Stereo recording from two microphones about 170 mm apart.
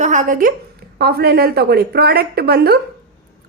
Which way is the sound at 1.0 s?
70° right (ahead or behind).